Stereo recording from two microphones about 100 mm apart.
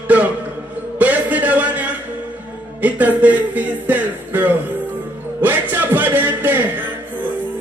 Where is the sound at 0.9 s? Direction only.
15° right (ahead or behind).